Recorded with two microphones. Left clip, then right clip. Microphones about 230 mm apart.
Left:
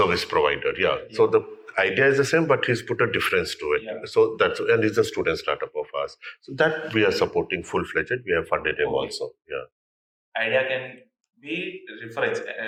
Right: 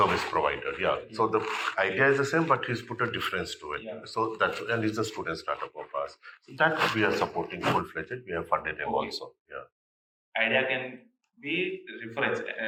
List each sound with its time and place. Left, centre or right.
0.0 s speech: left
10.3 s a man's voice: left